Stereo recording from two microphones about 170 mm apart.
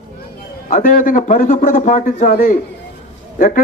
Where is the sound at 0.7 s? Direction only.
50° left (ahead or behind).